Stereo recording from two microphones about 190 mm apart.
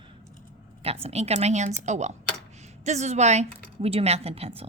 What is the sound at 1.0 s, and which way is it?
A woman's voice, 35° right (ahead or behind).